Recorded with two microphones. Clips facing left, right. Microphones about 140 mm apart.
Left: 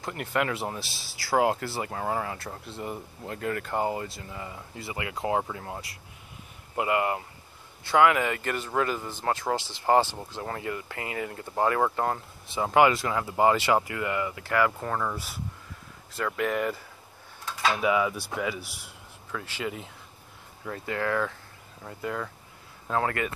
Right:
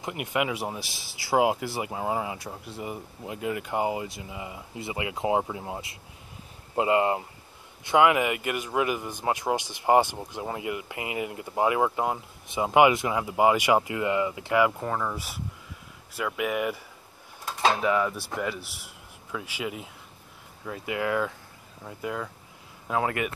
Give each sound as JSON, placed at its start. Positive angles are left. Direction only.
{"t": 0.0, "sound": "a man's voice", "side_deg": -15}
{"t": 14.8, "sound": "a man's voice", "side_deg": -5}
{"t": 17.8, "sound": "a man's voice", "side_deg": 5}